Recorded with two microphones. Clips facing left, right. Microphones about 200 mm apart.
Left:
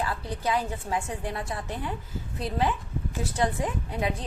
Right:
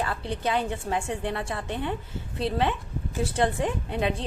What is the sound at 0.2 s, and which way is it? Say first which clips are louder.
A woman's voice: right 1 dB; 25° right (ahead or behind).